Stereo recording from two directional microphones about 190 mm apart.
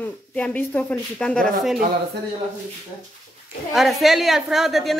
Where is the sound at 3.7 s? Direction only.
Centre (ahead or behind).